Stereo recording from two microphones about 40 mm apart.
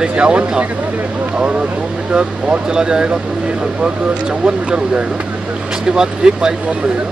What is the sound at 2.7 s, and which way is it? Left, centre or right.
Speech, centre.